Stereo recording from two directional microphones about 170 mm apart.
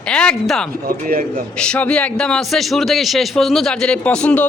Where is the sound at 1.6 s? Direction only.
5° left (ahead or behind).